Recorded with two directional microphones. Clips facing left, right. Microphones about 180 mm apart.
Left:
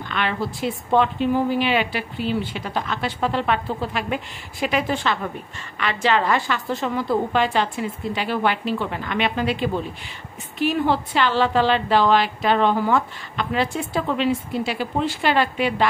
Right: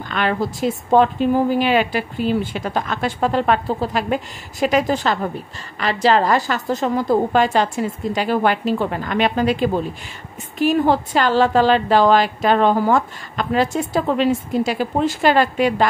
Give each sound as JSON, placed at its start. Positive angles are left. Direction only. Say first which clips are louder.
{"t": 0.1, "sound": "a woman's voice", "louder": "right 5 dB", "side_deg": -40}